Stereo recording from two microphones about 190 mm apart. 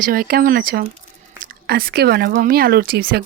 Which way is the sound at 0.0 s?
50° right (ahead or behind).